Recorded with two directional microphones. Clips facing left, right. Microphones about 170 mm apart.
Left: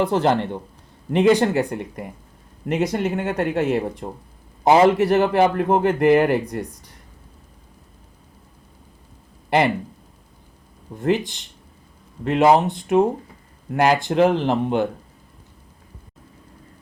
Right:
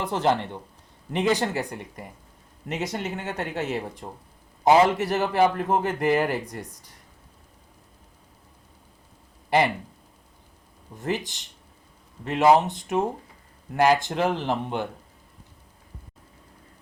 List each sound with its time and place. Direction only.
0.0 s a man's voice: 55° left (ahead or behind)
10.9 s a man's voice: 60° left (ahead or behind)